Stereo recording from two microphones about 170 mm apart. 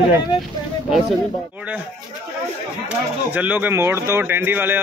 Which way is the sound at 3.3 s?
10° right (ahead or behind).